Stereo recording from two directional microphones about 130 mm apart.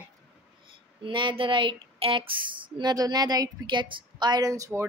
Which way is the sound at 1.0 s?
40° right (ahead or behind).